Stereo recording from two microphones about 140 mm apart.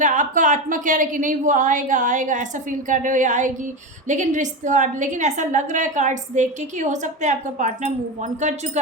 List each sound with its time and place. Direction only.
0.0 s a woman's voice: 65° right (ahead or behind)